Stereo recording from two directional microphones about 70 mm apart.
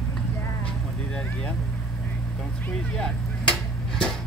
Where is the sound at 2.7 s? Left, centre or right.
Centre.